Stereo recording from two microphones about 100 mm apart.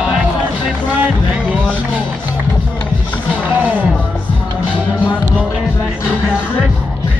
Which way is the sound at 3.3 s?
15° right (ahead or behind).